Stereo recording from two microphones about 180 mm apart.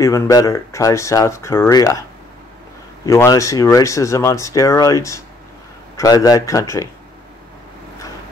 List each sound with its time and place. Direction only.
0.0 s speech: 20° left (ahead or behind)
3.1 s speech: 15° left (ahead or behind)